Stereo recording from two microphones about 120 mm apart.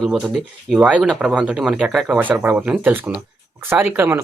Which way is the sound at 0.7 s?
10° right (ahead or behind).